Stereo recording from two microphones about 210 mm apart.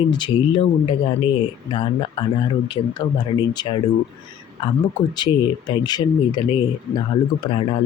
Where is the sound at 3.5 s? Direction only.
20° left (ahead or behind).